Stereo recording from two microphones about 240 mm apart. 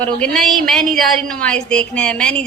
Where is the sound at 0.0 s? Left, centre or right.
Centre.